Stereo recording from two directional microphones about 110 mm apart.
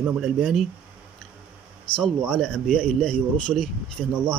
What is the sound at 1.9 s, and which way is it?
Speech, 50° left (ahead or behind).